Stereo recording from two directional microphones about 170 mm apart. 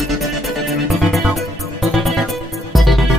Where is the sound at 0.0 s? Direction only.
Centre (ahead or behind).